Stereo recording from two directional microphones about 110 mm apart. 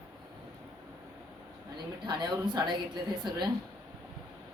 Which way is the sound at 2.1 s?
40° right (ahead or behind).